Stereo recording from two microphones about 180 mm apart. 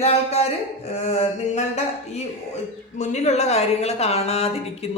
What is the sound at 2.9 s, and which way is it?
Speech, 40° left (ahead or behind).